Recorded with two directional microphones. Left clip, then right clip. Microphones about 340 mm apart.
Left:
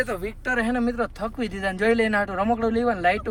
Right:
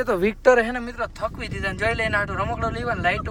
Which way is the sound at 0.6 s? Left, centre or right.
Centre.